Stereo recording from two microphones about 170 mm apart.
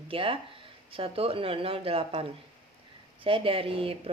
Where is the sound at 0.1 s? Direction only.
30° right (ahead or behind).